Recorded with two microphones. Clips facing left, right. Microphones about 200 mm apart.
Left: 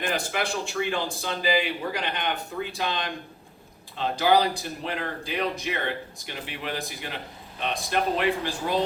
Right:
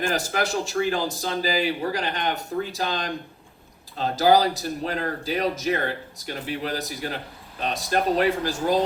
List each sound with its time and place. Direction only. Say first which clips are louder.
0.1 s speech: right 3 dB; 40° right (ahead or behind)